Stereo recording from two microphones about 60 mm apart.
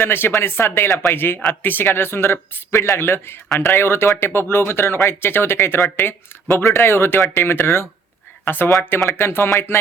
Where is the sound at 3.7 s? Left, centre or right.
Left.